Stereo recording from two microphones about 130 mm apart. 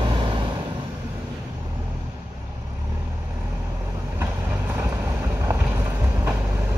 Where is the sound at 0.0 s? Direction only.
40° right (ahead or behind).